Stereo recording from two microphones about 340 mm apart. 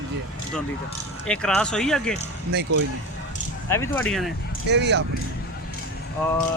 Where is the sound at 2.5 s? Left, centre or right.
Right.